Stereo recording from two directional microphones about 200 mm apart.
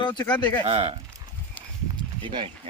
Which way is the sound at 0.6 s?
25° right (ahead or behind).